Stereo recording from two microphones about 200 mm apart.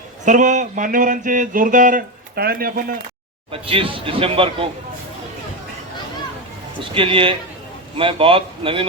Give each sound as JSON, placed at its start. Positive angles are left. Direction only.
{"t": 0.3, "sound": "speech", "side_deg": -40}
{"t": 3.5, "sound": "speech", "side_deg": -25}
{"t": 6.7, "sound": "speech", "side_deg": -25}